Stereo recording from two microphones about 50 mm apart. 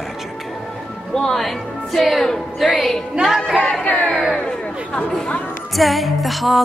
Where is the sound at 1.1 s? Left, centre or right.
Centre.